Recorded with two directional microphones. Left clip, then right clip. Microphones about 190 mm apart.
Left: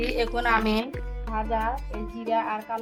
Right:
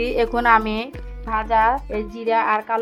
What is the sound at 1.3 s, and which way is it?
Speech, 90° right.